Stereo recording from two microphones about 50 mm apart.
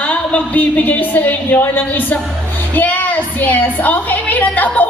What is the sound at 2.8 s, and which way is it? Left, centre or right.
A woman's voice, left.